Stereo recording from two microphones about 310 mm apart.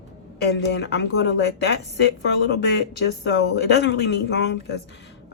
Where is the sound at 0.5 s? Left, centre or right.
Left.